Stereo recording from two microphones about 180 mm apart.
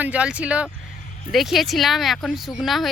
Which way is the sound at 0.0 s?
5° right (ahead or behind).